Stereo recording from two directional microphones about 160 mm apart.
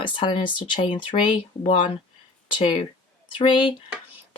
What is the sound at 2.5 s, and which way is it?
Speech, 30° left (ahead or behind).